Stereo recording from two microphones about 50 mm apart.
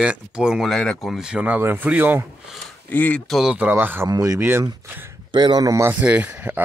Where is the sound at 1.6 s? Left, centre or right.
Right.